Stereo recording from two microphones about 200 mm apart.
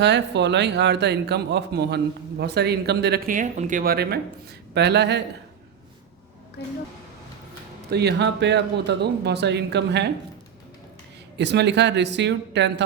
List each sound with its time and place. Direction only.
0.0 s speech: 60° right (ahead or behind)
6.6 s speech: 55° left (ahead or behind)
7.9 s speech: 55° right (ahead or behind)
11.3 s speech: 60° right (ahead or behind)